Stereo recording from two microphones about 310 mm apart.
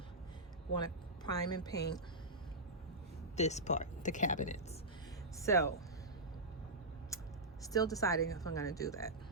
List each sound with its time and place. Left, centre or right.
0.8 s speech: centre
1.7 s speech: left
3.3 s speech: left
5.4 s speech: centre
7.1 s a sound: centre
7.6 s speech: centre